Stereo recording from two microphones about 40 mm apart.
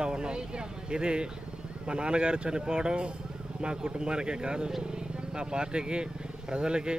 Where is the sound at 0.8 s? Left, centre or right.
Right.